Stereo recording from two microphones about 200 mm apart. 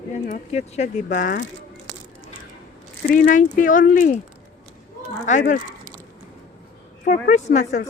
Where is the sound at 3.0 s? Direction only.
45° left (ahead or behind).